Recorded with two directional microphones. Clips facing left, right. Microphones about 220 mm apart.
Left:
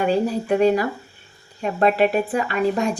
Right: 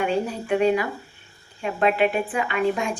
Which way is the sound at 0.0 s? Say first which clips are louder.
Left 4 dB; 35° left (ahead or behind).